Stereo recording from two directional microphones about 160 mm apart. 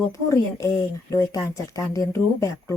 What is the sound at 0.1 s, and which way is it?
Speech, 20° left (ahead or behind).